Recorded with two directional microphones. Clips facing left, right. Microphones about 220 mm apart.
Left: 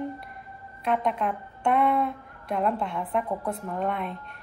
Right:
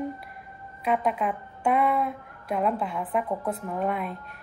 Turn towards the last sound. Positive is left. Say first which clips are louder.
# right 1 dB
turn(degrees=0)  # may be behind; listen again after turning